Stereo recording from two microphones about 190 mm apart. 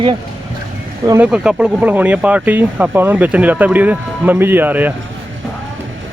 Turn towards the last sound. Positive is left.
turn(degrees=-10)  # may be behind; listen again after turning